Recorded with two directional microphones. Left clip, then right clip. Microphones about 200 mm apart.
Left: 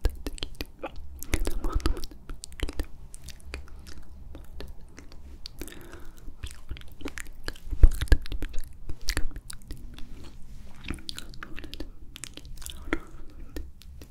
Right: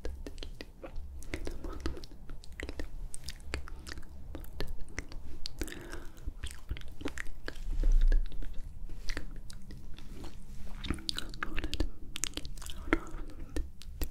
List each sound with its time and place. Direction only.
0.0 s whispering: 20° left (ahead or behind)
3.5 s chewing: 20° right (ahead or behind); by 7.5 s centre (ahead or behind)
8.0 s a sound: 35° left (ahead or behind)
9.0 s chewing: 20° left (ahead or behind)
11.1 s chewing: 20° right (ahead or behind)
12.5 s chewing: 5° right (ahead or behind)
13.5 s a sound: 10° right (ahead or behind)